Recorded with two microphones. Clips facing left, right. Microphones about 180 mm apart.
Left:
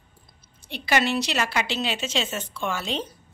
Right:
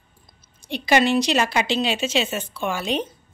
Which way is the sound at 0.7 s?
15° right (ahead or behind).